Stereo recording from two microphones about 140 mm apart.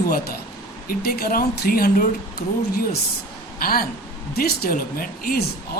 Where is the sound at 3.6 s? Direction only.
90° left.